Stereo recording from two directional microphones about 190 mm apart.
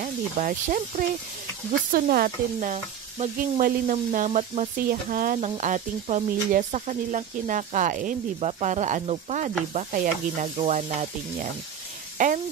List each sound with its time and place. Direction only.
0.0 s speech: 45° right (ahead or behind)